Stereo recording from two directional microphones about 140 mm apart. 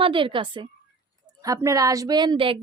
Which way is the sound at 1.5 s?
25° right (ahead or behind).